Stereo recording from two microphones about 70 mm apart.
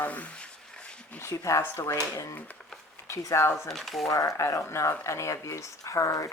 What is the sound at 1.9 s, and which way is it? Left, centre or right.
Speech, left.